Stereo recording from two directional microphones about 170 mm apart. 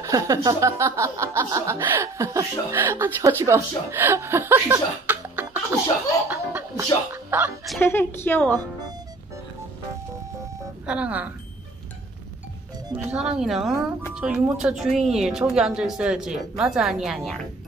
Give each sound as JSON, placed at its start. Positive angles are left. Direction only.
{"t": 0.0, "sound": "chuckle", "side_deg": -20}
{"t": 2.7, "sound": "speech", "side_deg": -15}
{"t": 7.8, "sound": "a woman's voice", "side_deg": 15}
{"t": 10.9, "sound": "chuckle", "side_deg": -10}
{"t": 12.9, "sound": "a woman's voice", "side_deg": -5}